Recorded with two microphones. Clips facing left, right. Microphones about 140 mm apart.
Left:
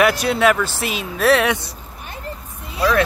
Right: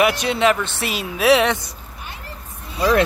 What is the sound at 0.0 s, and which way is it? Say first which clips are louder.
Speech: left 1 dB; 5° left (ahead or behind).